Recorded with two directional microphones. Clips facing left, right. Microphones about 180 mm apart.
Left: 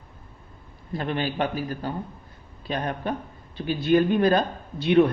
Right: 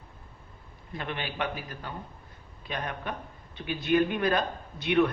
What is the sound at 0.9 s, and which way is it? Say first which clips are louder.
Speech: left 7 dB; 35° left (ahead or behind).